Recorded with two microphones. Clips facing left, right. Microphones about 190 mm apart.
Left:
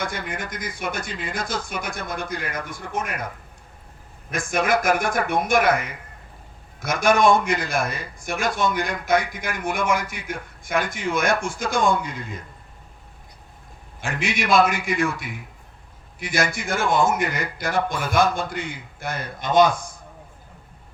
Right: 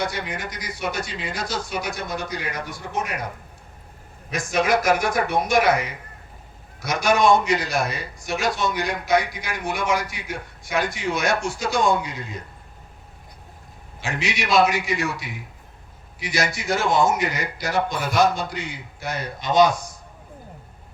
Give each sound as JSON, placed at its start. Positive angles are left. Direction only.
{"t": 0.0, "sound": "a man's voice", "side_deg": 50}
{"t": 4.3, "sound": "a man's voice", "side_deg": 50}
{"t": 14.0, "sound": "a man's voice", "side_deg": 50}